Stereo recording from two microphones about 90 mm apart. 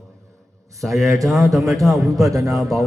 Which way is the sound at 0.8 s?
Centre (ahead or behind).